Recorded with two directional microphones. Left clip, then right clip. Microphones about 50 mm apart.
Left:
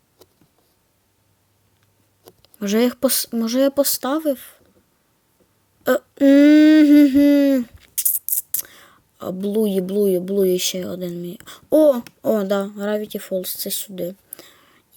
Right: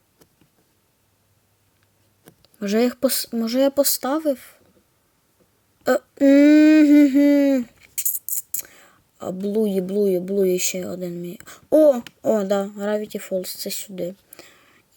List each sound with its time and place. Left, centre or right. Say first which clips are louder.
2.4 s speech: left 1 dB; left
3.7 s speech: left 1 dB; centre
5.8 s a sound: left 1 dB; centre
8.8 s whispering: left 1 dB; centre
9.4 s a woman's voice: left 1 dB; left
9.7 s speech: left 2 dB; left
13.0 s a woman's voice: left 1 dB; left
13.3 s speech: left 1 dB; centre
14.3 s a sound: left 1 dB; left